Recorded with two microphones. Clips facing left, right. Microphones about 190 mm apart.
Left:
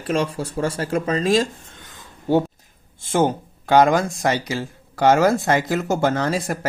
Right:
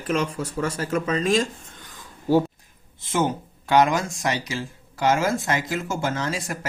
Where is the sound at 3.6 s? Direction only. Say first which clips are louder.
Left 4 dB; 45° left (ahead or behind).